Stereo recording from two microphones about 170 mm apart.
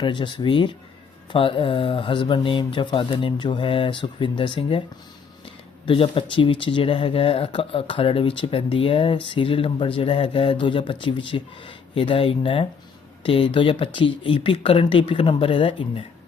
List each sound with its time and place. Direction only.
0.0 s speech: 25° left (ahead or behind)
5.8 s speech: 30° left (ahead or behind)